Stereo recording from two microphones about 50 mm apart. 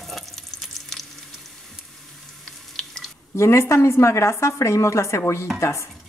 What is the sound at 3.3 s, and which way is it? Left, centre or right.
A woman's voice, left.